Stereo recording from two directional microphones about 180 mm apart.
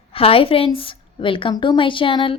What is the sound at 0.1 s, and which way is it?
A woman's voice, 30° left (ahead or behind).